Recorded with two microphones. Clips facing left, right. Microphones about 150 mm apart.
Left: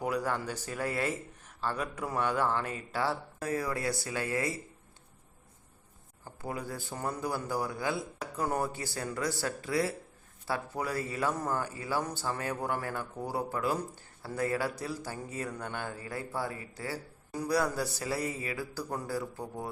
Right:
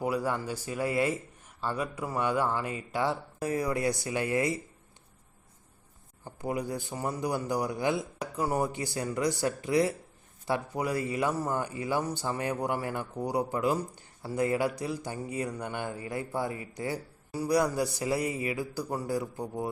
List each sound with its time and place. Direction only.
0.0 s a man's voice: 10° right (ahead or behind)
6.2 s a man's voice: 15° right (ahead or behind)